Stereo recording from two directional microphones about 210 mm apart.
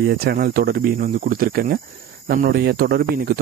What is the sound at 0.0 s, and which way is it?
Speech, 50° right (ahead or behind).